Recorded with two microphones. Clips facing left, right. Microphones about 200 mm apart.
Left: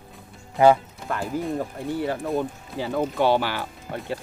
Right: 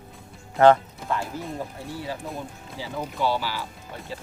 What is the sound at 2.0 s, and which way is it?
Speech, 60° left (ahead or behind).